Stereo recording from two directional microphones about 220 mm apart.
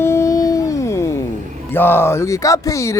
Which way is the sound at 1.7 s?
10° left (ahead or behind).